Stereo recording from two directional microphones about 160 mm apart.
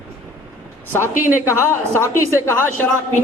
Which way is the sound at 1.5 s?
15° left (ahead or behind).